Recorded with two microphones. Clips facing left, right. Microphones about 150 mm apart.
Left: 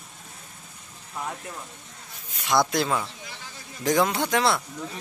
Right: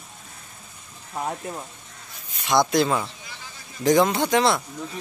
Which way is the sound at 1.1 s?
30° right (ahead or behind).